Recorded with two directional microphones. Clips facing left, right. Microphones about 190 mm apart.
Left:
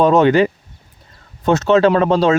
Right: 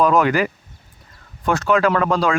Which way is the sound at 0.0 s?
25° left (ahead or behind).